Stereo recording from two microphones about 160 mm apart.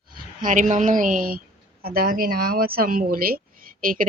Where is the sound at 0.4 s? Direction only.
50° right (ahead or behind).